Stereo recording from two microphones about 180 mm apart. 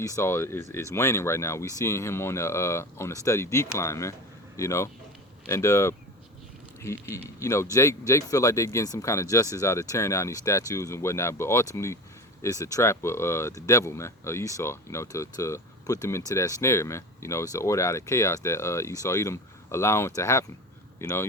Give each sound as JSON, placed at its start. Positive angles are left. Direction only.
{"t": 0.0, "sound": "speech", "side_deg": 15}